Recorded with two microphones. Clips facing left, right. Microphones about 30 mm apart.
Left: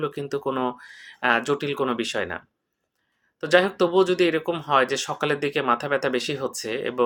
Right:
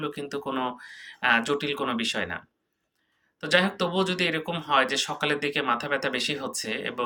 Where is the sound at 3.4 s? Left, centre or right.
Right.